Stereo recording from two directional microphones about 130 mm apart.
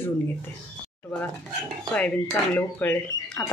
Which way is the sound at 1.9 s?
10° left (ahead or behind).